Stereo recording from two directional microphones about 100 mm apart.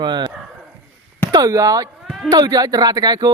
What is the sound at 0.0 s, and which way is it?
Speech, 50° right (ahead or behind).